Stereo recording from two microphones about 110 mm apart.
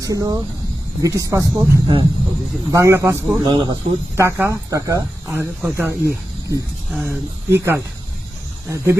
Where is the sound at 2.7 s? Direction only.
25° right (ahead or behind).